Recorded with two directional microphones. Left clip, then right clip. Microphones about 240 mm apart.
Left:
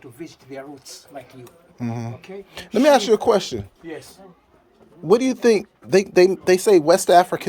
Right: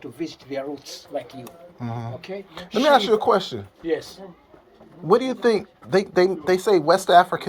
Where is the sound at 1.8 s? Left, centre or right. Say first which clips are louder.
Left 2 dB; left.